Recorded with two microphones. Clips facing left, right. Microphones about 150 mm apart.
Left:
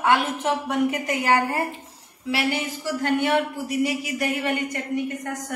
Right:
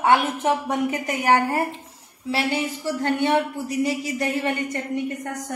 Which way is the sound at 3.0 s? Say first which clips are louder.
Right 1 dB; 25° right (ahead or behind).